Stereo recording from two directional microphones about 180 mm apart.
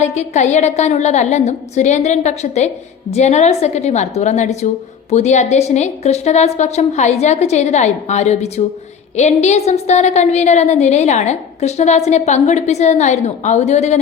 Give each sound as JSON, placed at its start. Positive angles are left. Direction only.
{"t": 0.0, "sound": "a woman's voice", "side_deg": 40}